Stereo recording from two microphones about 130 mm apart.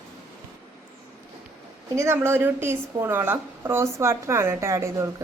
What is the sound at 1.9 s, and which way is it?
A woman's voice, 20° right (ahead or behind).